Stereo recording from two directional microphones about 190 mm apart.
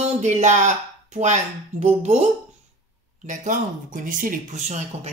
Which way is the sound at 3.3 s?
40° right (ahead or behind).